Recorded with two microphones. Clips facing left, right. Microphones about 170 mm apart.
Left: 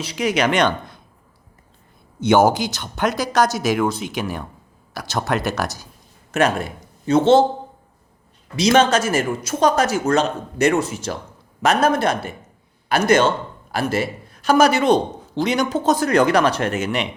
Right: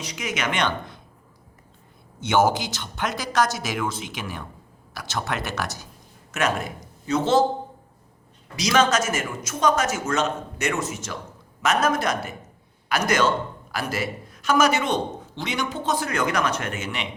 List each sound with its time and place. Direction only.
0.0 s a man's voice: 35° left (ahead or behind)
2.2 s a man's voice: 40° left (ahead or behind)
8.8 s a man's voice: 30° left (ahead or behind)